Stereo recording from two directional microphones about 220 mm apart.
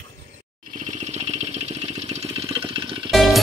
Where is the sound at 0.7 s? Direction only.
30° right (ahead or behind).